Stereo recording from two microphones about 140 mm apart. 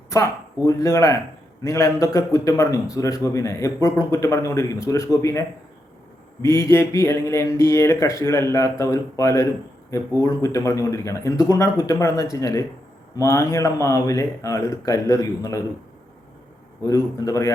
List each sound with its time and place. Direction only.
0.1 s a man's voice: 20° left (ahead or behind)
16.8 s a man's voice: 25° left (ahead or behind)